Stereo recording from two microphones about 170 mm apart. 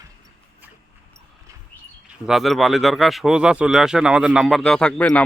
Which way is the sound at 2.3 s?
Centre (ahead or behind).